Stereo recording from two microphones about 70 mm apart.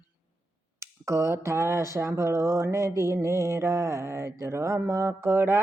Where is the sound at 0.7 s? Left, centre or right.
Right.